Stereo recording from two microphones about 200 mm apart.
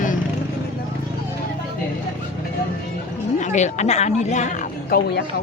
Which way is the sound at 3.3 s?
35° left (ahead or behind).